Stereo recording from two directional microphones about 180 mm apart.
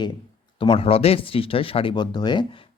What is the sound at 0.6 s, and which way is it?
Speech, 30° left (ahead or behind).